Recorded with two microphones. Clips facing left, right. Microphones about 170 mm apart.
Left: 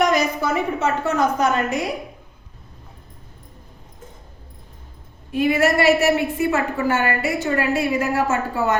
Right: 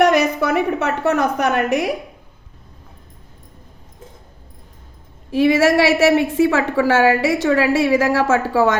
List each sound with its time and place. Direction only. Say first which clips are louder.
0.0 s a woman's voice: right 4 dB; 65° right (ahead or behind)
5.3 s a woman's voice: right 4 dB; 90° right